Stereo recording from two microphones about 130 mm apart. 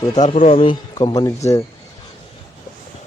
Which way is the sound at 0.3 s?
60° left (ahead or behind).